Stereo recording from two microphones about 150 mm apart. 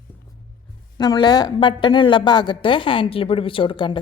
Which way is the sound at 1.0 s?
30° left (ahead or behind).